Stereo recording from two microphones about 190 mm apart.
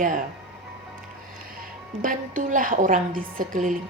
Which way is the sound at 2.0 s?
45° right (ahead or behind).